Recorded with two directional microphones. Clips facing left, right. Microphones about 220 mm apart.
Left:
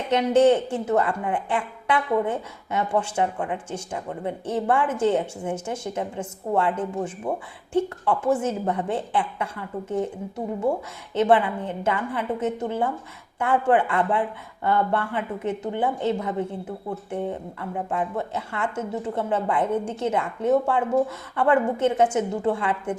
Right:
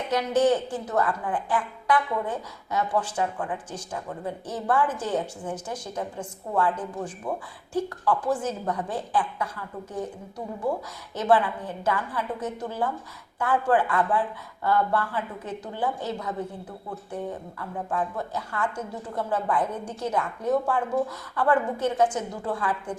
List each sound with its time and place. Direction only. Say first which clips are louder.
0.1 s speech: left 5 dB; 25° left (ahead or behind)